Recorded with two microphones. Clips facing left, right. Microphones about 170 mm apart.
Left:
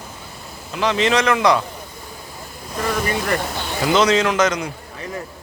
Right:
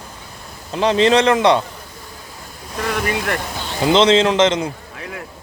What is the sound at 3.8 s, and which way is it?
Speech, 25° right (ahead or behind).